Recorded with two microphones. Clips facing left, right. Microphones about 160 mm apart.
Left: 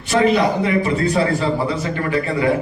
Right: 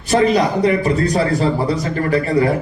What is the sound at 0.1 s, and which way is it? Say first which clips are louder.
A man's voice: right 1 dB; 40° right (ahead or behind).